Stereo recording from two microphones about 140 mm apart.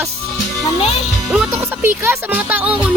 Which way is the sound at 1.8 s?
15° right (ahead or behind).